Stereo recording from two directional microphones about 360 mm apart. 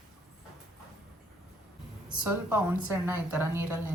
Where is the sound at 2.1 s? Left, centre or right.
Centre.